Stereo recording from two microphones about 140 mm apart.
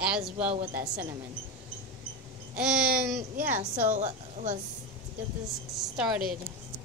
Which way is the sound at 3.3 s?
60° right (ahead or behind).